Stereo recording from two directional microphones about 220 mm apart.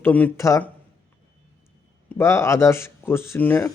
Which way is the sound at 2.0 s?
10° left (ahead or behind).